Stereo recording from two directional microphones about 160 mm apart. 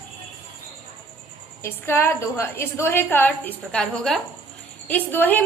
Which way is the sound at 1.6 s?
15° left (ahead or behind).